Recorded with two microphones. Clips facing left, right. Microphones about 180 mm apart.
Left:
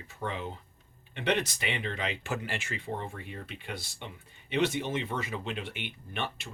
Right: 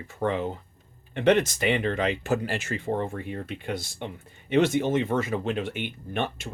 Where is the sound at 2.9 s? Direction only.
55° right (ahead or behind).